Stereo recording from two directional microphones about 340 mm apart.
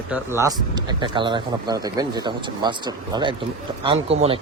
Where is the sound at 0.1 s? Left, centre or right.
Centre.